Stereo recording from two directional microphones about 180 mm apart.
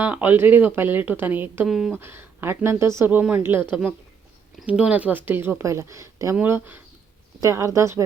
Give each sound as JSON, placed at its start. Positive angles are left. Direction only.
{"t": 0.0, "sound": "speech", "side_deg": -10}
{"t": 2.0, "sound": "speech", "side_deg": -15}
{"t": 4.6, "sound": "speech", "side_deg": -5}